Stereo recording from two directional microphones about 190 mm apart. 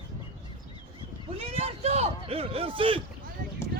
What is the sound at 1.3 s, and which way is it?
Speech, 30° right (ahead or behind).